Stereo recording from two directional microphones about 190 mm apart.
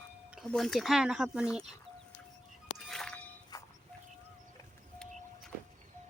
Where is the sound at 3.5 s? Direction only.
20° left (ahead or behind).